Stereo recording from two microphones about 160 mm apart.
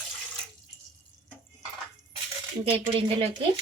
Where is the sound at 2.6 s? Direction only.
35° right (ahead or behind).